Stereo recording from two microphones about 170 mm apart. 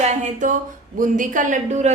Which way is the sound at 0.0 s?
45° right (ahead or behind).